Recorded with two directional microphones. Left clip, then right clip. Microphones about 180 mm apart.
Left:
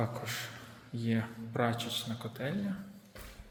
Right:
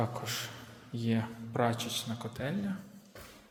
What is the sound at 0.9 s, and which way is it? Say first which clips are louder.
Speech: right 1 dB; 15° right (ahead or behind).